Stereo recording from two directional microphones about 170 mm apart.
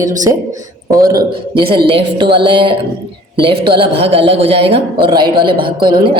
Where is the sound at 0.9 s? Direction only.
60° right (ahead or behind).